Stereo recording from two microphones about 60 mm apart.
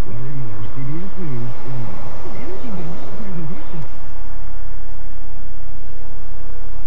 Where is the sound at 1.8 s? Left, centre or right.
Right.